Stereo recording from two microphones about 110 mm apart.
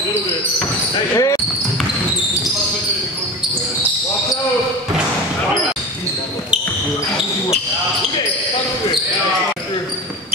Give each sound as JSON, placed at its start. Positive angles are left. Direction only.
{"t": 1.1, "sound": "basketball bounce", "side_deg": 30}